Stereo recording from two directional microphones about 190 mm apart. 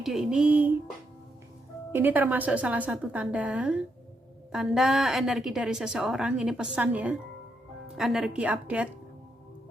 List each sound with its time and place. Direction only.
0.0 s a woman's voice: centre (ahead or behind)
1.9 s a woman's voice: 10° right (ahead or behind)